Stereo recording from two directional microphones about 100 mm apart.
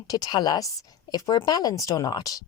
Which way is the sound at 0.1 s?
40° left (ahead or behind).